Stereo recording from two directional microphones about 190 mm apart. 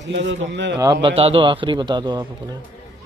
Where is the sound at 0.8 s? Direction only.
20° right (ahead or behind).